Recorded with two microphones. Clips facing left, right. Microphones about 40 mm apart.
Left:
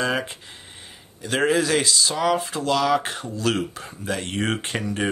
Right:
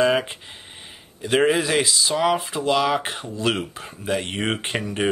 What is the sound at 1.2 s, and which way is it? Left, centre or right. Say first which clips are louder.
Speech: right 2 dB; centre.